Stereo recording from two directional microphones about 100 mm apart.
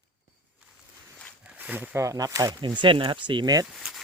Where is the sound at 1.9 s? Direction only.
35° right (ahead or behind); by 3.5 s 55° right (ahead or behind).